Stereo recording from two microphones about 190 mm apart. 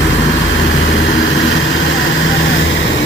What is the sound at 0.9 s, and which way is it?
Vehicle, 80° left.